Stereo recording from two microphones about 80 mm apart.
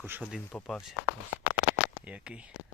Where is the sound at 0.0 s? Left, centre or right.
Centre.